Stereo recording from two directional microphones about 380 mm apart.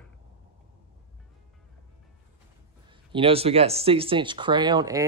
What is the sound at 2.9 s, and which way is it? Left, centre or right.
Speech, centre.